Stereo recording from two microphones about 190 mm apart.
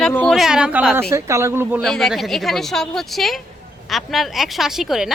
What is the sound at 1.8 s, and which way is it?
Speech, centre (ahead or behind).